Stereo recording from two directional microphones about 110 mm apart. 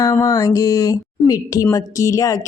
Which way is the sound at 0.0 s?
30° left (ahead or behind).